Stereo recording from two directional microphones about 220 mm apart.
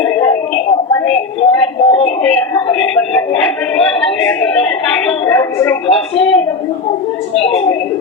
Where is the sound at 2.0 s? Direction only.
5° left (ahead or behind).